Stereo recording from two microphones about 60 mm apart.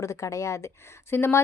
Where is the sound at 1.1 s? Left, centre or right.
Left.